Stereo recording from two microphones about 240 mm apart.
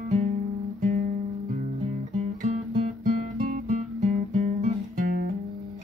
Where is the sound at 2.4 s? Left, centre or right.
Right.